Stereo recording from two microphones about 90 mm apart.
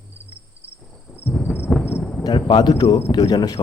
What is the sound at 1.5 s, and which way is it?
Thunder, 10° right (ahead or behind).